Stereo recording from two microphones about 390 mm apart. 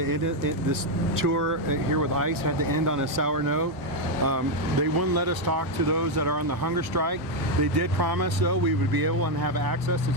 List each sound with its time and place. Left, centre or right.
0.0 s speech: right